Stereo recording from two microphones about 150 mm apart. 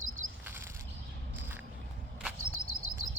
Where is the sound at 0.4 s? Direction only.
15° right (ahead or behind).